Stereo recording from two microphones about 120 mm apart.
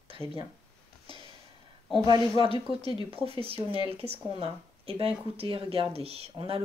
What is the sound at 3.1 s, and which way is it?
Speech, 55° right (ahead or behind).